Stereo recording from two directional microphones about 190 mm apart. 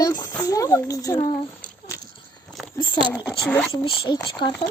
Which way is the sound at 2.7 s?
25° left (ahead or behind).